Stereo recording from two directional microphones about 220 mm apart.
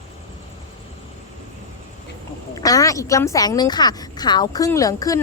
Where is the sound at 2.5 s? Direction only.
15° left (ahead or behind).